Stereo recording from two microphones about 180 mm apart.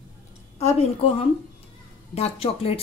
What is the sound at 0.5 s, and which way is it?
Speech, 35° left (ahead or behind).